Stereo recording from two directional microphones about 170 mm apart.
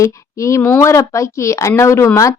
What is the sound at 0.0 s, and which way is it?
Speech, 20° left (ahead or behind).